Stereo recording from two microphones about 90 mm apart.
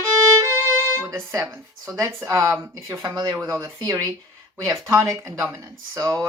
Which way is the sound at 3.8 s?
40° right (ahead or behind).